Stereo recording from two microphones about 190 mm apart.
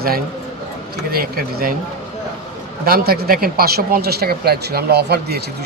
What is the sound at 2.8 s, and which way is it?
Speech, 55° right (ahead or behind).